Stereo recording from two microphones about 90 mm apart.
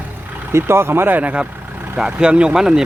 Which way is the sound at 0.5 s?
30° right (ahead or behind).